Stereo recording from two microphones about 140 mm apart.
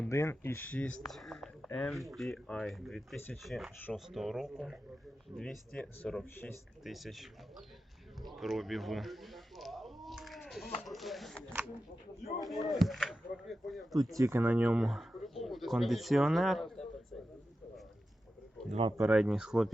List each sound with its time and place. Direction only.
0.1 s speech: 20° left (ahead or behind); by 13.8 s centre (ahead or behind)
14.2 s speech: 15° right (ahead or behind); by 16.8 s centre (ahead or behind)
18.7 s speech: 40° right (ahead or behind)
19.0 s speech: 5° right (ahead or behind)